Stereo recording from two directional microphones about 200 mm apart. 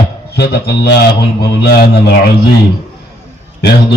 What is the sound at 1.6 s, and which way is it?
Speech, 55° left (ahead or behind).